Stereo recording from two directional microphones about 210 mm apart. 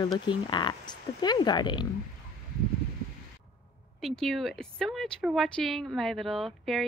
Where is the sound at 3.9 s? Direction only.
Centre (ahead or behind).